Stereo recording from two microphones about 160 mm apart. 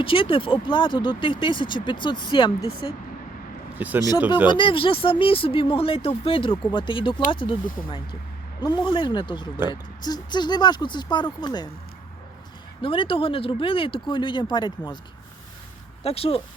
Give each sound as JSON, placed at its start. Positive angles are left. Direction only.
{"t": 0.0, "sound": "speech", "side_deg": 35}
{"t": 3.8, "sound": "speech", "side_deg": -10}
{"t": 4.4, "sound": "speech", "side_deg": 30}
{"t": 12.8, "sound": "speech", "side_deg": 35}
{"t": 16.0, "sound": "speech", "side_deg": 40}